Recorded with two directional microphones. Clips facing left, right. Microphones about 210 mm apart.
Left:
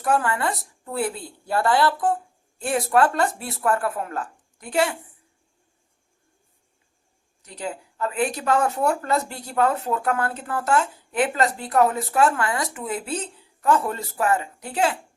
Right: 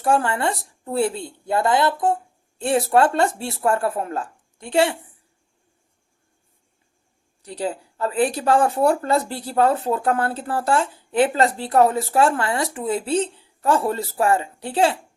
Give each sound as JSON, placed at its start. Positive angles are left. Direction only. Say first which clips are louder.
{"t": 0.0, "sound": "speech", "louder": "right 2 dB", "side_deg": -30}
{"t": 7.4, "sound": "speech", "louder": "right 5 dB", "side_deg": -35}